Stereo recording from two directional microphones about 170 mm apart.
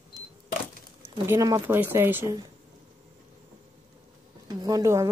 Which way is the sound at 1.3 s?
15° right (ahead or behind).